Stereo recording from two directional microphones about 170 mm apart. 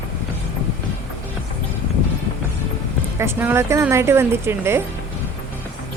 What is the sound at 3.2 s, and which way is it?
A woman's voice, 15° right (ahead or behind).